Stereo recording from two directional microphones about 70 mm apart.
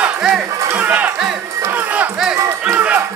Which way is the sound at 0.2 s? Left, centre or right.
Centre.